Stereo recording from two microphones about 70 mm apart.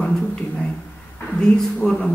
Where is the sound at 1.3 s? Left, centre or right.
Centre.